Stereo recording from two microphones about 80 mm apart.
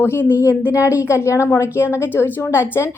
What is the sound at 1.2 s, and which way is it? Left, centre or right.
A woman's voice, left.